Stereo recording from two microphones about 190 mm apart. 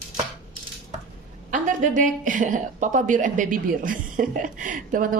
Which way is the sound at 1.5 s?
40° right (ahead or behind).